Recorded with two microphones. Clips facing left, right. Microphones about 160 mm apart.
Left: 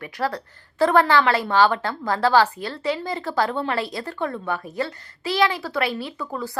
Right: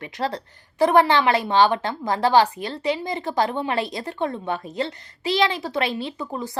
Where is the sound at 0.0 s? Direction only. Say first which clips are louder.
Left 1 dB; 20° right (ahead or behind).